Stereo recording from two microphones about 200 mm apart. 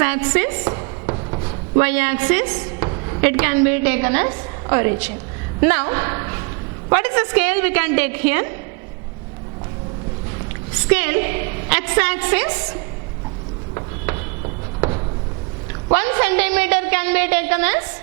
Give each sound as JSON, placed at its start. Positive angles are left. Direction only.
{"t": 0.0, "sound": "chopping", "side_deg": -10}
{"t": 1.8, "sound": "a woman's voice", "side_deg": -10}
{"t": 2.5, "sound": "a woman's voice", "side_deg": -25}
{"t": 10.8, "sound": "a woman's voice", "side_deg": -10}
{"t": 14.8, "sound": "a sound", "side_deg": -25}
{"t": 15.9, "sound": "a woman's voice", "side_deg": -10}